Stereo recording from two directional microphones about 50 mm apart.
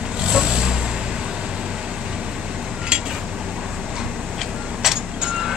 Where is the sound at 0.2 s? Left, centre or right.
Centre.